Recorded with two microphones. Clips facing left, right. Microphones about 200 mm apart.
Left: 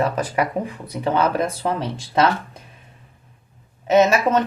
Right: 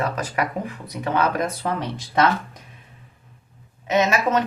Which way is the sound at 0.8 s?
25° left (ahead or behind).